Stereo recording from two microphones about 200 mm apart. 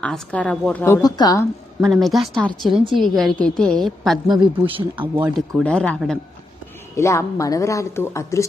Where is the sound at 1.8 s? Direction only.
Centre (ahead or behind).